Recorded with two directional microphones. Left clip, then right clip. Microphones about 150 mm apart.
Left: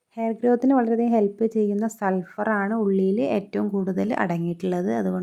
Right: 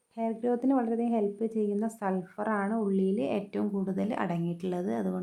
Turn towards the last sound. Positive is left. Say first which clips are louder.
# left 7 dB
turn(degrees=35)  # may be behind; listen again after turning